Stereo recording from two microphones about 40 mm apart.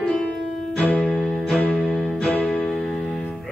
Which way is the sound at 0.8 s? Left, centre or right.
Centre.